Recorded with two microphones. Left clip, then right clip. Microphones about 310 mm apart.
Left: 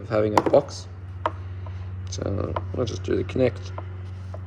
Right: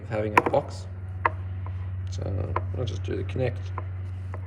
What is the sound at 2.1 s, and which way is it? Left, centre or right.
Speech, left.